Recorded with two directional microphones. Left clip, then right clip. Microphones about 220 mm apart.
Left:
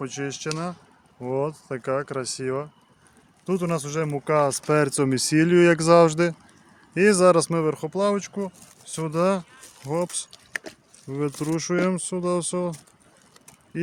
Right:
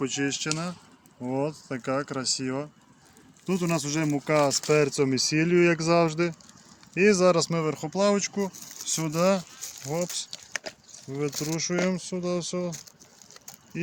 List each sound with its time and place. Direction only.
0.0 s speech: 30° left (ahead or behind)
9.8 s speech: 45° left (ahead or behind)